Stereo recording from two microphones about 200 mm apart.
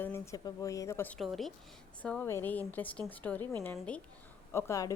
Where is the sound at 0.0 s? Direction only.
15° left (ahead or behind).